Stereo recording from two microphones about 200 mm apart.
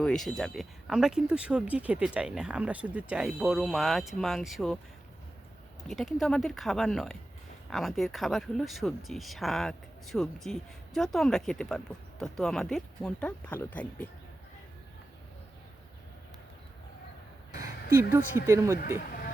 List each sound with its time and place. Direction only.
0.0 s speech: centre (ahead or behind)
5.9 s speech: centre (ahead or behind)
17.6 s a sound: 10° right (ahead or behind)
18.3 s speech: 15° right (ahead or behind)
18.8 s speech: 45° left (ahead or behind)